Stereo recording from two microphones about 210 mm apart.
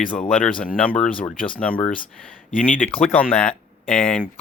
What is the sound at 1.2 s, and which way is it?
Speech, 25° left (ahead or behind).